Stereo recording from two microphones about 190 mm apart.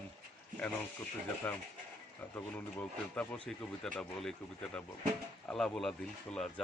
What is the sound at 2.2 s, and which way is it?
Speech, 10° left (ahead or behind).